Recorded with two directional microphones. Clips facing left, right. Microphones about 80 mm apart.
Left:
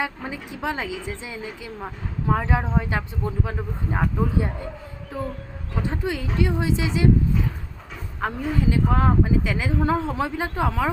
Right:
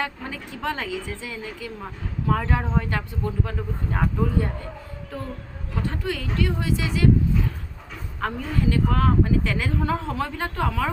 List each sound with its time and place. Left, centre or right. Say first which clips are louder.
0.0 s speech: left 1 dB; centre
5.8 s speech: left 2 dB; centre
8.2 s speech: left 1 dB; centre